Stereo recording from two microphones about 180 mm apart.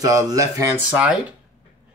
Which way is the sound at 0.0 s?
15° right (ahead or behind).